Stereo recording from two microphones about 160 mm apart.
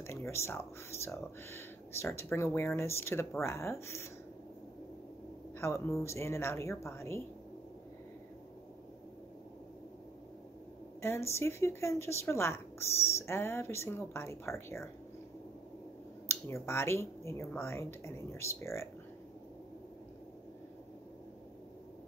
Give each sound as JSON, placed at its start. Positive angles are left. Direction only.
{"t": 0.0, "sound": "speech", "side_deg": 15}
{"t": 5.6, "sound": "speech", "side_deg": 15}
{"t": 11.0, "sound": "speech", "side_deg": 15}
{"t": 16.6, "sound": "speech", "side_deg": 15}